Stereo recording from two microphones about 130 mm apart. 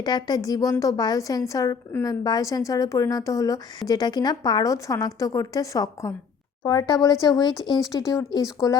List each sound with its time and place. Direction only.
0.0 s a woman's voice: 30° left (ahead or behind)